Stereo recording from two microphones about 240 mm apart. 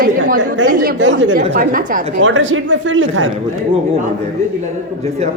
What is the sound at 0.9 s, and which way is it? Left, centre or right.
Speech, right.